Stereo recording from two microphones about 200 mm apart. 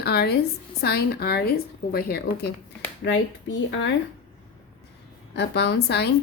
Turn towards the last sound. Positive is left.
turn(degrees=55)  # may be behind; listen again after turning